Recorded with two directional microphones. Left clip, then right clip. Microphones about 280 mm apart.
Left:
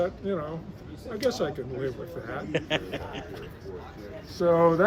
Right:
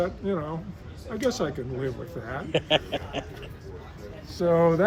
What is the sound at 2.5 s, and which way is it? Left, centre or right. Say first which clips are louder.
Speech: right 5 dB; left.